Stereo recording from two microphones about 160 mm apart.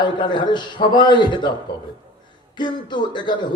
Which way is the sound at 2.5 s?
30° left (ahead or behind).